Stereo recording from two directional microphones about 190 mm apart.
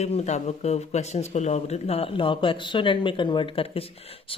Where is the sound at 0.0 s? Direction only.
35° left (ahead or behind).